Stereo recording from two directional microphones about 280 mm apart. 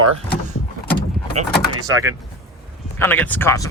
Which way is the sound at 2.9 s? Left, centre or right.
Centre.